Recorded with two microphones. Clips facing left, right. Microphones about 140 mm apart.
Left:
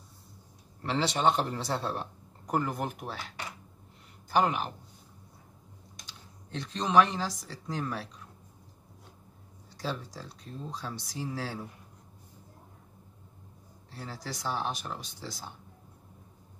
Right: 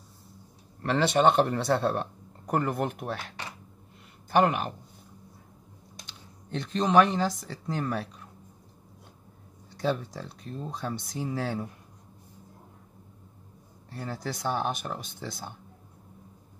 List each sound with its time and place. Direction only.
0.8 s speech: 55° right (ahead or behind)
4.3 s speech: 55° right (ahead or behind)
6.5 s speech: 55° right (ahead or behind)
9.8 s speech: 60° right (ahead or behind)
13.8 s speech: 55° right (ahead or behind)